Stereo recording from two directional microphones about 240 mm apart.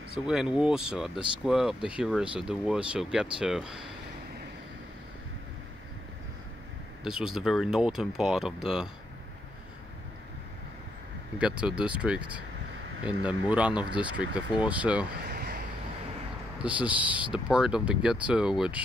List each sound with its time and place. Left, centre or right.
0.3 s speech: centre
7.0 s speech: centre
11.3 s speech: centre
15.2 s a sound: right
16.6 s speech: centre